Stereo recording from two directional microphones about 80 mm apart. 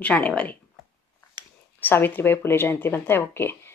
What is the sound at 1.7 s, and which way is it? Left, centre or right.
Speech, left.